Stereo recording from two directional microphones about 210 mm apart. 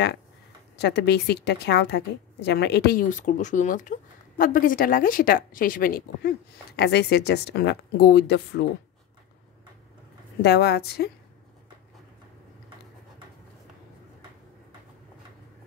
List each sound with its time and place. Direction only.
0.7 s a woman's voice: 55° left (ahead or behind)
10.4 s a woman's voice: 50° left (ahead or behind)